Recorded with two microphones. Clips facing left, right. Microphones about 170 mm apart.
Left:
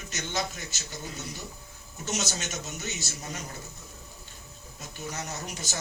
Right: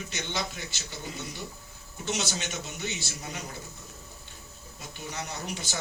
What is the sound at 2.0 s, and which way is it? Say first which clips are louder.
A man's voice: right 1 dB; 45° left (ahead or behind).